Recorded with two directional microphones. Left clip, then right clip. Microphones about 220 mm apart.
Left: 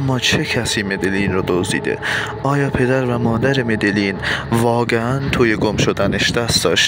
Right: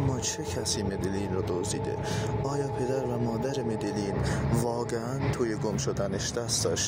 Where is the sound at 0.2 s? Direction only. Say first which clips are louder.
Left 15 dB; 45° left (ahead or behind).